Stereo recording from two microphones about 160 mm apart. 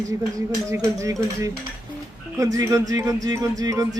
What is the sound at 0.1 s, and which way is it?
Speech, 20° right (ahead or behind).